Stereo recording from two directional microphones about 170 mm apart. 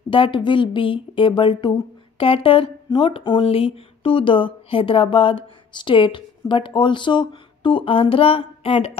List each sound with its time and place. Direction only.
0.1 s speech: 30° left (ahead or behind)